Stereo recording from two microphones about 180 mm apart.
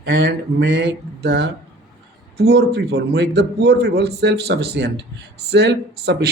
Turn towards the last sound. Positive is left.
turn(degrees=-65)  # may be behind; listen again after turning